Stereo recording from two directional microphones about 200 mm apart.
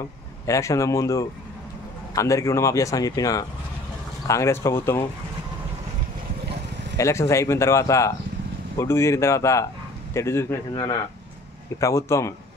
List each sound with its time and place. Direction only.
0.5 s speech: 15° left (ahead or behind)
7.0 s speech: 15° left (ahead or behind)